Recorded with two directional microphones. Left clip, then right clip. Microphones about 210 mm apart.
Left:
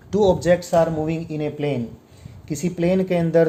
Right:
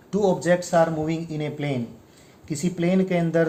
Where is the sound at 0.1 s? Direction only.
35° left (ahead or behind).